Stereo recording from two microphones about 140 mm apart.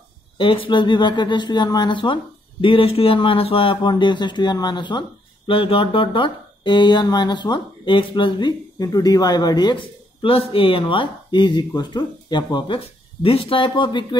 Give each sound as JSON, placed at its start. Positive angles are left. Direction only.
{"t": 0.4, "sound": "speech", "side_deg": 40}